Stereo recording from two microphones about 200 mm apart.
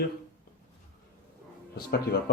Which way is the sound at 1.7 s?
55° left (ahead or behind).